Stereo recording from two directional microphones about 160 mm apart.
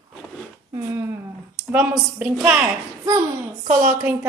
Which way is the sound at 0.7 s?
15° right (ahead or behind).